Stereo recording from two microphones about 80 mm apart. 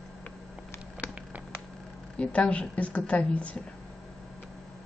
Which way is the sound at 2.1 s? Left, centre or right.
Centre.